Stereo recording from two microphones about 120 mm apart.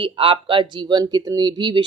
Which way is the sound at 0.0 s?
50° right (ahead or behind).